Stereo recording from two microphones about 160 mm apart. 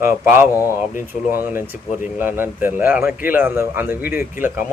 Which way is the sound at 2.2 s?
15° right (ahead or behind).